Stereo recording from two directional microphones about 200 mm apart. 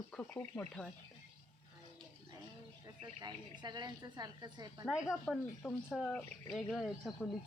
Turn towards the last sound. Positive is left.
turn(degrees=0)  # may be behind; listen again after turning